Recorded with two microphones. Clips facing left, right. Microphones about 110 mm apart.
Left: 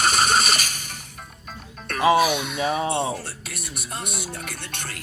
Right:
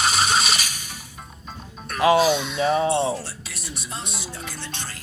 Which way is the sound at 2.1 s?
55° left (ahead or behind).